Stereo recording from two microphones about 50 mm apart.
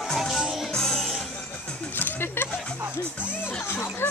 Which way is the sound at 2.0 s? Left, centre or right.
Left.